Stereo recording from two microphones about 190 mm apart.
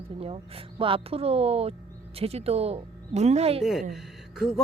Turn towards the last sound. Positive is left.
turn(degrees=0)  # may be behind; listen again after turning